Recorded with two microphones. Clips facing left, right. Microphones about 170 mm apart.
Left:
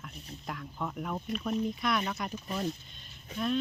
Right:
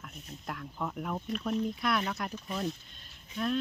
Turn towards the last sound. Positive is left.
turn(degrees=0)  # may be behind; listen again after turning